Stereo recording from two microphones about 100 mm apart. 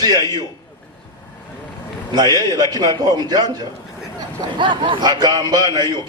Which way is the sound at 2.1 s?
45° right (ahead or behind).